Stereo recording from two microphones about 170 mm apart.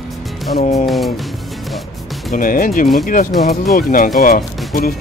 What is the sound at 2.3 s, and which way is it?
Speech, 55° left (ahead or behind).